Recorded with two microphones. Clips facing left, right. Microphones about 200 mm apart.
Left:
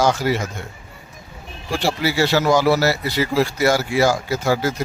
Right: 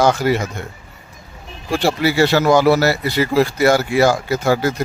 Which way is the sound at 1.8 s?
60° right (ahead or behind).